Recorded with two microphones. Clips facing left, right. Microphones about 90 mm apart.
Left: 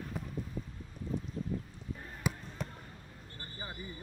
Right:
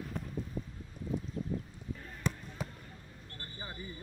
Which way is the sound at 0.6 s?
30° right (ahead or behind).